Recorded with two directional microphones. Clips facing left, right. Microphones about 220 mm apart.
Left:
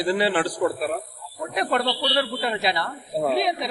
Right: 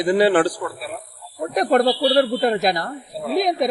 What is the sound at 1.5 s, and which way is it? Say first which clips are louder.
Speech: right 7 dB; 40° right (ahead or behind).